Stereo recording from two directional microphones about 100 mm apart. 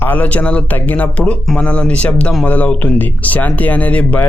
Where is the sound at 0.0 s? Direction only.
15° left (ahead or behind).